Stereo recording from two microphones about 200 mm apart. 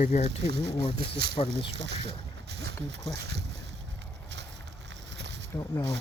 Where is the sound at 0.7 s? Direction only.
25° left (ahead or behind).